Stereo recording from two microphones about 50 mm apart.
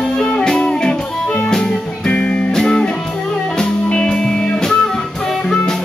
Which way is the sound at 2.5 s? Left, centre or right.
Centre.